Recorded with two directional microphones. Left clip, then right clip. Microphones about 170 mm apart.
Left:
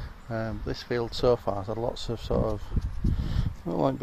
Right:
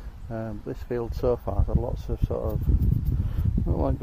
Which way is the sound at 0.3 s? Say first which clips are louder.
Left 1 dB; 10° left (ahead or behind).